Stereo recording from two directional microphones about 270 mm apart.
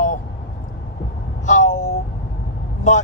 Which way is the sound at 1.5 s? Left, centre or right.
Left.